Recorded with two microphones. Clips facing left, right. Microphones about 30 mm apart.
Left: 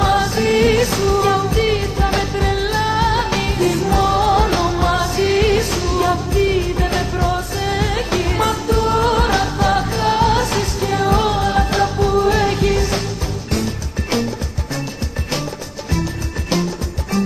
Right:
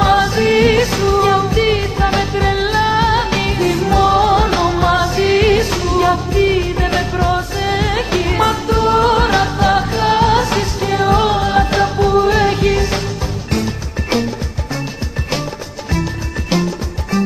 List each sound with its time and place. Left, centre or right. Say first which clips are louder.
0.0 s music: right 3 dB; centre
15.9 s music: right 2 dB; centre